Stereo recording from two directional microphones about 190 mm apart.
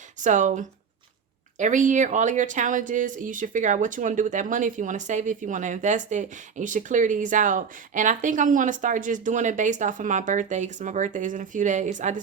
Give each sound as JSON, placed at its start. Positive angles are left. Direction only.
{"t": 0.2, "sound": "a woman's voice", "side_deg": -40}